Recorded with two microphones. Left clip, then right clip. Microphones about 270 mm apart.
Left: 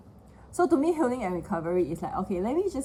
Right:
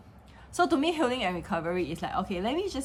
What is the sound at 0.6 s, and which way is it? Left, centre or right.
A woman's voice, right.